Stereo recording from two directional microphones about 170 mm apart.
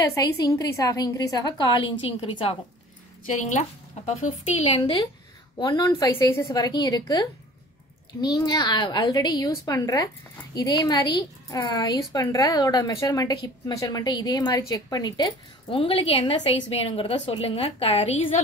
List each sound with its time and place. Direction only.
0.1 s a woman's voice: 20° left (ahead or behind)
3.3 s speech: 45° left (ahead or behind)
5.6 s a woman's voice: 20° left (ahead or behind)